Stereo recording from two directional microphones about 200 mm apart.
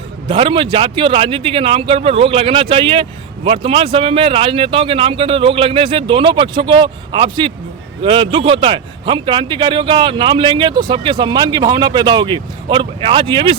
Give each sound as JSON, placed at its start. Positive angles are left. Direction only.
{"t": 0.3, "sound": "a man's voice", "side_deg": -25}